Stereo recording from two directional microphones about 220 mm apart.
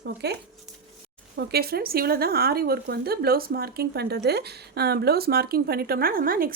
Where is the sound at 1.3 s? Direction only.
45° right (ahead or behind).